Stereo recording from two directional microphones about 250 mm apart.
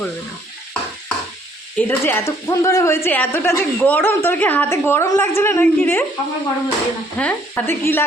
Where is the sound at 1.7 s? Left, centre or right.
Centre.